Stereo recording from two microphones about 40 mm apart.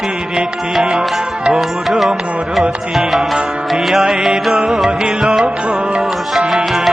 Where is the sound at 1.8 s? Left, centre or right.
Centre.